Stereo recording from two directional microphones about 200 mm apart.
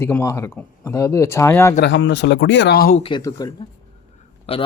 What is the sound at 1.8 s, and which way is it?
Speech, 65° left (ahead or behind).